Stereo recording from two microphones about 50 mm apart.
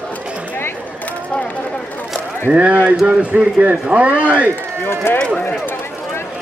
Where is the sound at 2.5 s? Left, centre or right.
Right.